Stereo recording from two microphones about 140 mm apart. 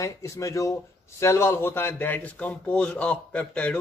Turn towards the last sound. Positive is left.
turn(degrees=5)  # may be behind; listen again after turning